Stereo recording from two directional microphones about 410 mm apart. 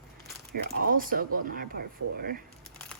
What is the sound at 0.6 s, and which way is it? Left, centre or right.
Speech, right.